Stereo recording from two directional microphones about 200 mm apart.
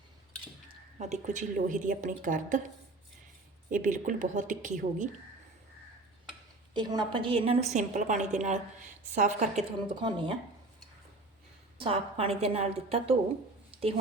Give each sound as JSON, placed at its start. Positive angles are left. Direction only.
{"t": 0.9, "sound": "a woman's voice", "side_deg": -35}
{"t": 3.7, "sound": "a woman's voice", "side_deg": -40}
{"t": 6.7, "sound": "a woman's voice", "side_deg": -20}
{"t": 10.0, "sound": "a woman's voice", "side_deg": -25}
{"t": 11.8, "sound": "a woman's voice", "side_deg": -30}
{"t": 13.7, "sound": "a sound", "side_deg": -30}